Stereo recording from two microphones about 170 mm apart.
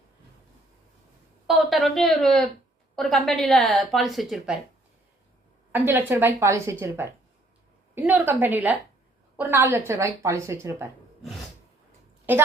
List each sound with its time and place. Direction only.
1.5 s a woman's voice: centre (ahead or behind)
5.7 s a woman's voice: 10° right (ahead or behind)
12.3 s a woman's voice: 10° right (ahead or behind)